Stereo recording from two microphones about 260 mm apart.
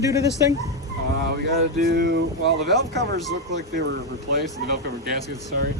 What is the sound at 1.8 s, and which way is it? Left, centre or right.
Speech, right.